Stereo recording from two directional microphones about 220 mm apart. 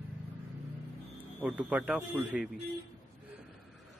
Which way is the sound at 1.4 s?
5° right (ahead or behind).